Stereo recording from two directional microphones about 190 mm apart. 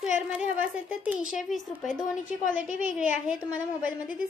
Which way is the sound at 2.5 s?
45° left (ahead or behind).